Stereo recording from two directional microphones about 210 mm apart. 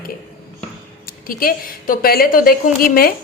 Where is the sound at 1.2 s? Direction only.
40° left (ahead or behind).